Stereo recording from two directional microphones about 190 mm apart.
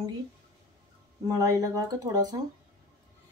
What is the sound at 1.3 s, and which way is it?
Speech, 15° right (ahead or behind).